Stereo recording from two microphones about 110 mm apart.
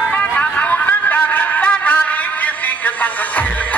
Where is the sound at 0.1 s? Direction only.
15° left (ahead or behind).